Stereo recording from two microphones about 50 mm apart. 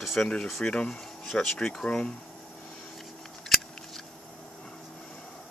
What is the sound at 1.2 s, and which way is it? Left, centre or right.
Speech, centre.